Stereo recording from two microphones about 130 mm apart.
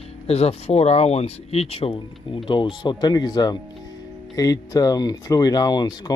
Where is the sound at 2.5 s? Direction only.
35° left (ahead or behind).